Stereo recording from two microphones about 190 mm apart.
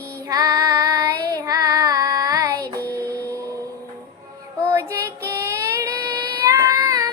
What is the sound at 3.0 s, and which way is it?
Printer, 20° right (ahead or behind).